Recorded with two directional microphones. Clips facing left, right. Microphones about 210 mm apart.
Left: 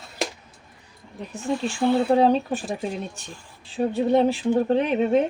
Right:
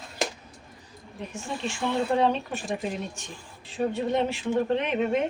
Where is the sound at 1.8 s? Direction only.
35° left (ahead or behind).